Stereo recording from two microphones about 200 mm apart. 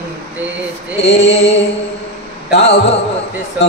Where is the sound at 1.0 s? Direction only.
35° left (ahead or behind).